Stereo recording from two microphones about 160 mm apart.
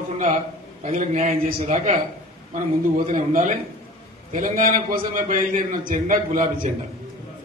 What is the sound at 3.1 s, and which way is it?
A man's voice, 50° right (ahead or behind).